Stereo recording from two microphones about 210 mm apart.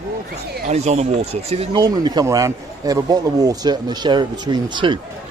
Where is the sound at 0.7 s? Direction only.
30° right (ahead or behind).